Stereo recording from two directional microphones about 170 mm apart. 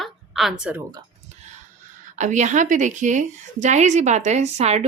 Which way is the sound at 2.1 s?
45° right (ahead or behind).